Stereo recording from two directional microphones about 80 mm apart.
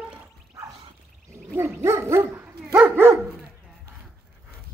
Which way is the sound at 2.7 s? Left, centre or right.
Centre.